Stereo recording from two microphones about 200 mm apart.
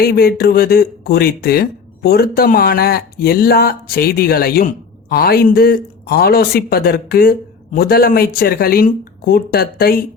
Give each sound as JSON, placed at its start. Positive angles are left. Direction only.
{"t": 0.0, "sound": "speech", "side_deg": 50}